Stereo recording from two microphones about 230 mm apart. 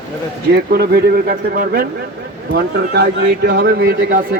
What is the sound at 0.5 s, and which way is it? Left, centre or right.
Speech, right.